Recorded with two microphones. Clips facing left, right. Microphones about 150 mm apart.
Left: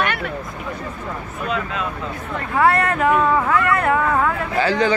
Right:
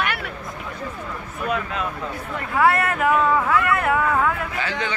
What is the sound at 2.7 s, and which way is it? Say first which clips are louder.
Speech: left 2 dB; 5° right (ahead or behind).